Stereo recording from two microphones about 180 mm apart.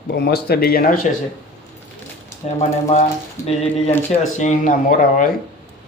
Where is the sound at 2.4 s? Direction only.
40° left (ahead or behind).